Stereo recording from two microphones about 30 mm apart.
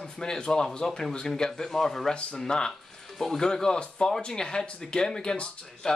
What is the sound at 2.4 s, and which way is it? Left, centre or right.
Speech, left.